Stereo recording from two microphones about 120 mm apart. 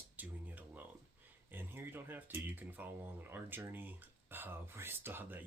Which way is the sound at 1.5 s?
20° right (ahead or behind).